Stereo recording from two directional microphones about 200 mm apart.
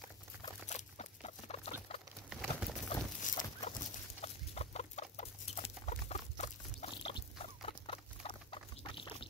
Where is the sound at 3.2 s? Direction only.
40° left (ahead or behind).